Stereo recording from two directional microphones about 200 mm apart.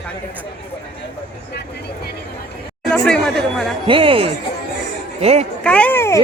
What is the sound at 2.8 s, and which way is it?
Speech, 5° left (ahead or behind).